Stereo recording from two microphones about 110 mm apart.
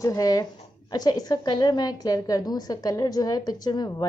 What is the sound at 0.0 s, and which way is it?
A woman's voice, 35° left (ahead or behind).